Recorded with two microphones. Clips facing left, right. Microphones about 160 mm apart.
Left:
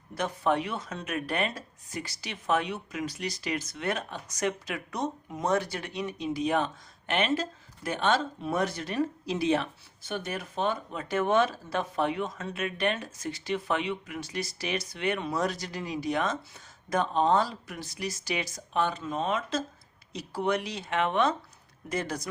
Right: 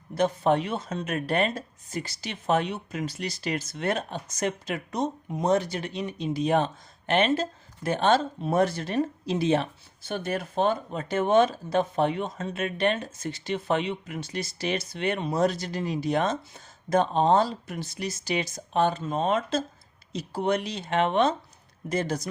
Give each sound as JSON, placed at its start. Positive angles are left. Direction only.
{"t": 0.1, "sound": "speech", "side_deg": -25}